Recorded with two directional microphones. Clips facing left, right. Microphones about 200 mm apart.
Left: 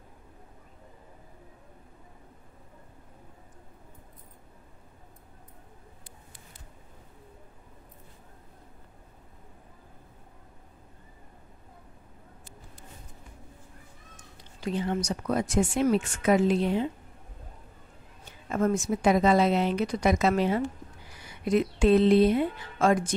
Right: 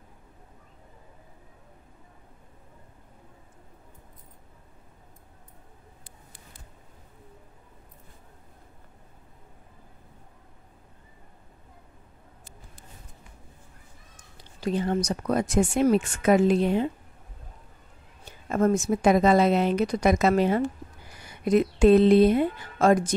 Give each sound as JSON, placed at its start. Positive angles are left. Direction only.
{"t": 14.6, "sound": "speech", "side_deg": -40}
{"t": 18.5, "sound": "speech", "side_deg": -45}